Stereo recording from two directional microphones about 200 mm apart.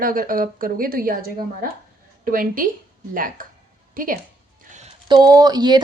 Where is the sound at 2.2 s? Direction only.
45° right (ahead or behind).